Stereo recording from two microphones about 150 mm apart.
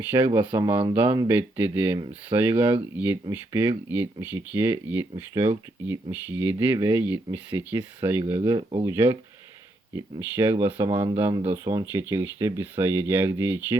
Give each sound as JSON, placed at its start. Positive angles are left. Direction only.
{"t": 0.0, "sound": "speech", "side_deg": -15}
{"t": 8.5, "sound": "speech", "side_deg": -35}
{"t": 8.9, "sound": "speech", "side_deg": -15}
{"t": 10.8, "sound": "speech", "side_deg": -35}
{"t": 11.4, "sound": "speech", "side_deg": -20}